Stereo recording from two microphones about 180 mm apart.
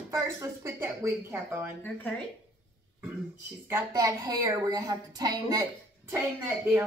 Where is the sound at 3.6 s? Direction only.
15° right (ahead or behind).